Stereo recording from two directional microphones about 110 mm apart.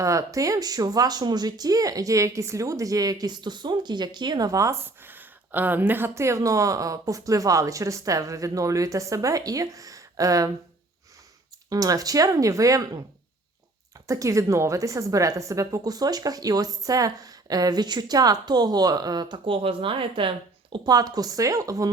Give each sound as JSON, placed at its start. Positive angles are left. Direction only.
{"t": 0.0, "sound": "speech", "side_deg": -30}
{"t": 11.7, "sound": "speech", "side_deg": -35}
{"t": 14.1, "sound": "speech", "side_deg": -30}
{"t": 20.7, "sound": "speech", "side_deg": -35}